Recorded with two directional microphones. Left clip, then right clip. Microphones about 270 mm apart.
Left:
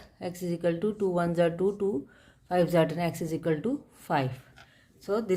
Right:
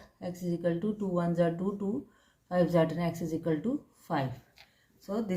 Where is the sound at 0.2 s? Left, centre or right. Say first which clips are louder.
Left 3 dB; left.